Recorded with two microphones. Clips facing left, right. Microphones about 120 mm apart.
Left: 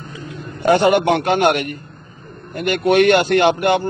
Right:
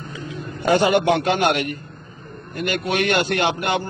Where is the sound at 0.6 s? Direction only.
55° left (ahead or behind).